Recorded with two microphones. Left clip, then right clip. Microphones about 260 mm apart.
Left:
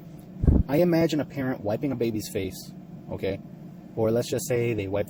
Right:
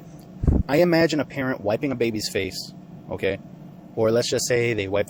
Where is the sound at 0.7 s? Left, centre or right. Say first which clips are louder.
Right 5 dB; right.